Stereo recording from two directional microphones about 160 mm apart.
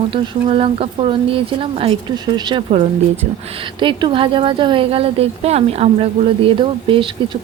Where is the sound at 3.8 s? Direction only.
30° right (ahead or behind).